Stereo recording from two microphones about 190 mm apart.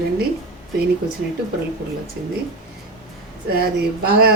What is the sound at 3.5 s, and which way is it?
Speech, 55° right (ahead or behind).